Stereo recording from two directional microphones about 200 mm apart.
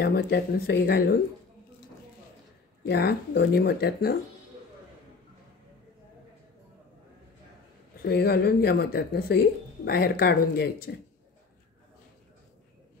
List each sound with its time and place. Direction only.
0.0 s speech: 55° left (ahead or behind)
2.9 s speech: 55° left (ahead or behind)
8.0 s speech: 55° left (ahead or behind)